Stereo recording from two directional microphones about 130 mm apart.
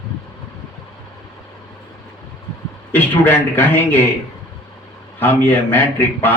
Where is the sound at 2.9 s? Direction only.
15° left (ahead or behind).